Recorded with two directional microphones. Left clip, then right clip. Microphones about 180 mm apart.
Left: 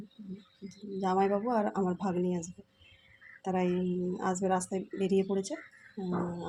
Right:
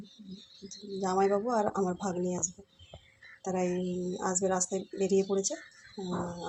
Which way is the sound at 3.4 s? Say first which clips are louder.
Even; 15° left (ahead or behind).